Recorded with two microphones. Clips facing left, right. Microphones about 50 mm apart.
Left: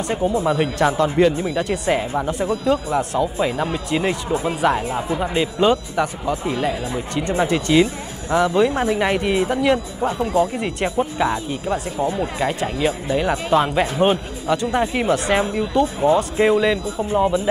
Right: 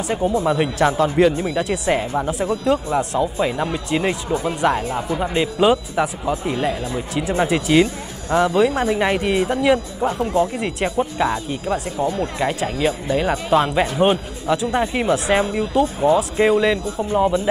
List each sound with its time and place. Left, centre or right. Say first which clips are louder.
0.5 s speech: right 1 dB; centre
4.3 s speech: even; centre
4.6 s speech: even; centre